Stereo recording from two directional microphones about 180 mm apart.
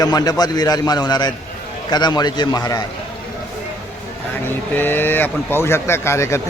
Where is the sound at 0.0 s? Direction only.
20° left (ahead or behind).